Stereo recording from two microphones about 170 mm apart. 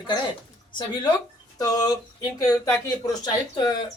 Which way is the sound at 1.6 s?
20° left (ahead or behind).